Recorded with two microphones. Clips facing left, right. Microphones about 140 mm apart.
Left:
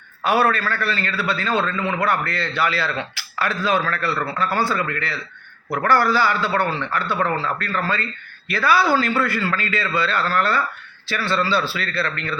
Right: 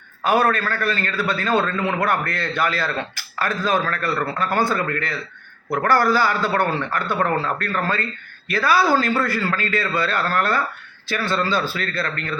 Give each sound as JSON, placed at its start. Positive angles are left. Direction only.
{"t": 0.3, "sound": "a man's voice", "side_deg": -45}